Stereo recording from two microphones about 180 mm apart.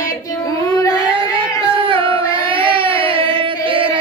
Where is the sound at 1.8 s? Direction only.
30° right (ahead or behind).